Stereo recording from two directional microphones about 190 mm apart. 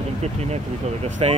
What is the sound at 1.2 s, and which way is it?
Speech, 30° right (ahead or behind).